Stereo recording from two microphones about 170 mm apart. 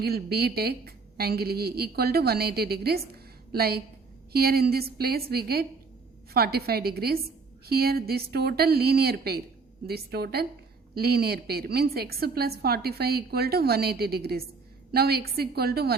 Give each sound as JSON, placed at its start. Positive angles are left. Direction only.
{"t": 0.0, "sound": "a woman's voice", "side_deg": -70}